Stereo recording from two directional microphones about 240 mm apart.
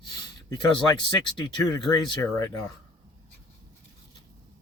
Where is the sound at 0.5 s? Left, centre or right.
Centre.